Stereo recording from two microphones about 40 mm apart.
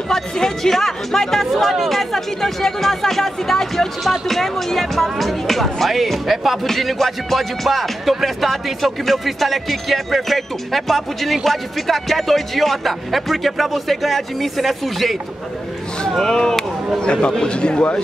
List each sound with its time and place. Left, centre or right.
0.1 s speech: centre
17.0 s a man's voice: left